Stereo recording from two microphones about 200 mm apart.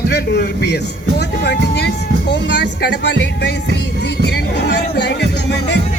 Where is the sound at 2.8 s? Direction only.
55° left (ahead or behind).